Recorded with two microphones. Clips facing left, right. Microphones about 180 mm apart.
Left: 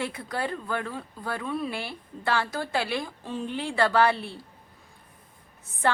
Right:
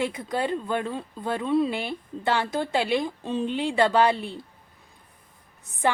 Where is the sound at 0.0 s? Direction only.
20° right (ahead or behind).